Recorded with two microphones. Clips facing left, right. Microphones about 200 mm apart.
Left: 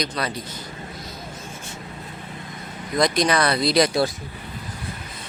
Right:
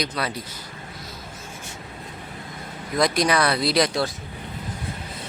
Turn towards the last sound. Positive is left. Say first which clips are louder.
# left 3 dB
turn(degrees=5)  # may be behind; listen again after turning